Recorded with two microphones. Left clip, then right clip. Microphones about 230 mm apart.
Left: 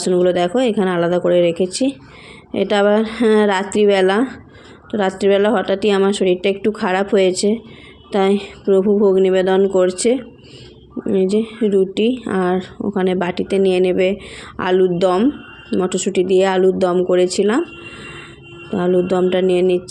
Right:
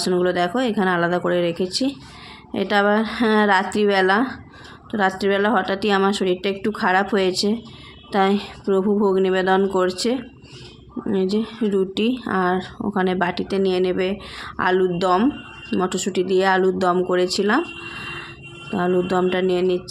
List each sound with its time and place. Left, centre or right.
0.0 s a woman's voice: centre